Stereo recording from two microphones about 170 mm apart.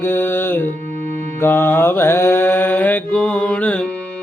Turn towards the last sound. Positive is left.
turn(degrees=5)  # may be behind; listen again after turning